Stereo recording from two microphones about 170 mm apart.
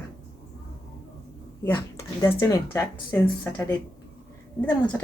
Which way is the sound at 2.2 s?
20° left (ahead or behind).